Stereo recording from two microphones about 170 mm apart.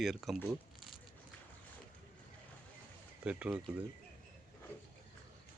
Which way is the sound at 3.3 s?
5° right (ahead or behind).